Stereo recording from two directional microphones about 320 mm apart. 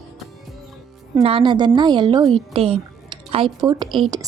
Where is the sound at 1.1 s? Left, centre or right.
Centre.